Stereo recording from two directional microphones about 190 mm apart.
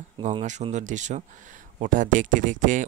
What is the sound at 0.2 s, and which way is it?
Speech, 35° right (ahead or behind).